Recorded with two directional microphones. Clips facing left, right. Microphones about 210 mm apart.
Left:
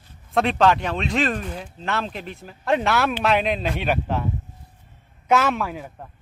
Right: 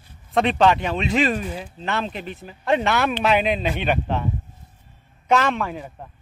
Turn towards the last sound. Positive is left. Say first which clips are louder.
# right 1 dB
turn(degrees=5)  # may be behind; listen again after turning